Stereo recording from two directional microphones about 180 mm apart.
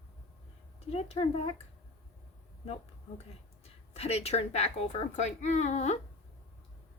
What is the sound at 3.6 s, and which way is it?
Speech, 35° left (ahead or behind).